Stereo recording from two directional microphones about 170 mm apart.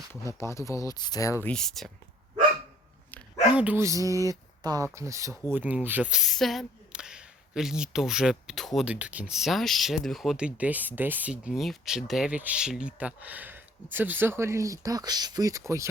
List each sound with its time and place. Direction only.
0.1 s speech: 15° left (ahead or behind)
1.5 s speech: 5° left (ahead or behind)
3.5 s speech: 10° right (ahead or behind)